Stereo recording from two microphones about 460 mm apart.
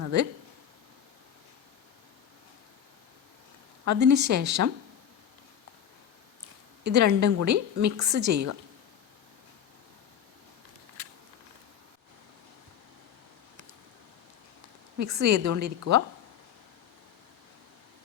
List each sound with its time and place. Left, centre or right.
0.0 s a sound: right
4.0 s a woman's voice: right
6.8 s a woman's voice: right
15.1 s a woman's voice: right